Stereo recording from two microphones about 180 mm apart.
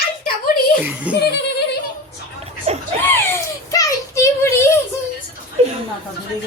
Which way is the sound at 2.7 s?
35° right (ahead or behind).